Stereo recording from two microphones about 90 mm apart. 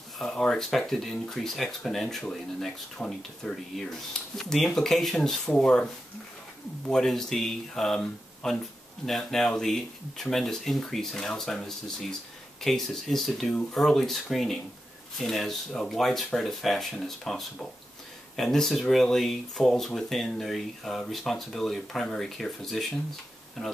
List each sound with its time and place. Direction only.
0.2 s speech: 5° left (ahead or behind)
6.9 s speech: 5° left (ahead or behind)